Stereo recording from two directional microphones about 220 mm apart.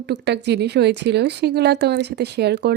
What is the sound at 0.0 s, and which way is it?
A woman's voice, 50° right (ahead or behind).